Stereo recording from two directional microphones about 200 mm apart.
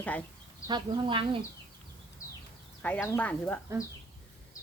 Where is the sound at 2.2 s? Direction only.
15° left (ahead or behind).